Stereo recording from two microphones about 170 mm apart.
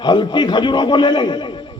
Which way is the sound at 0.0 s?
25° left (ahead or behind).